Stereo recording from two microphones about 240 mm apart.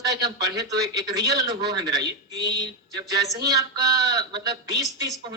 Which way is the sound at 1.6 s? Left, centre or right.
Right.